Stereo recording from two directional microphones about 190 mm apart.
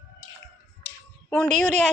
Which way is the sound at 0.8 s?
10° left (ahead or behind).